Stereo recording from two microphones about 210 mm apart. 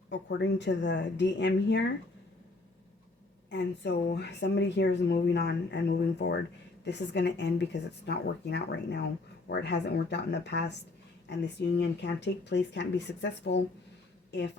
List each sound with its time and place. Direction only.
0.1 s speech: 55° left (ahead or behind)
3.5 s a woman's voice: 55° left (ahead or behind)